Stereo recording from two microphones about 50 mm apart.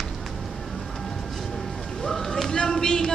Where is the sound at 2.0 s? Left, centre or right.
Centre.